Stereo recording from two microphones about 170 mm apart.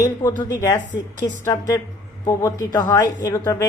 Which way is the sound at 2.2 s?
20° left (ahead or behind).